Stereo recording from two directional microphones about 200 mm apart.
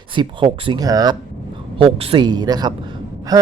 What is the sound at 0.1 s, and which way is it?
A man's voice, 25° right (ahead or behind).